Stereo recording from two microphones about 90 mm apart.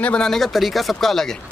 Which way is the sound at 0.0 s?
10° left (ahead or behind).